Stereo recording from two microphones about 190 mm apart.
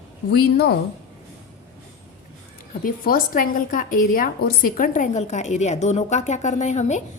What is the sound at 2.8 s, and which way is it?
A woman's voice, 50° left (ahead or behind).